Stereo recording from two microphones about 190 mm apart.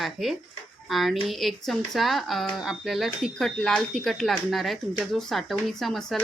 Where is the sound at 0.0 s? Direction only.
Centre (ahead or behind).